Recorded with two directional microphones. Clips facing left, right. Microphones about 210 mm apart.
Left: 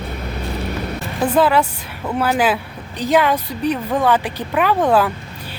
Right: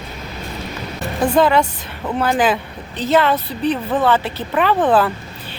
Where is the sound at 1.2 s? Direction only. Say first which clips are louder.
Right 1 dB; 5° left (ahead or behind).